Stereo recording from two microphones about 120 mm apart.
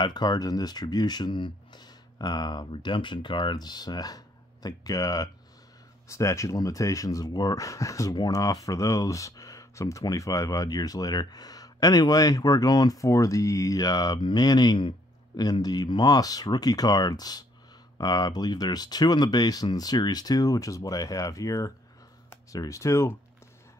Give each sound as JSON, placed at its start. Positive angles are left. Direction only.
{"t": 0.0, "sound": "speech", "side_deg": 35}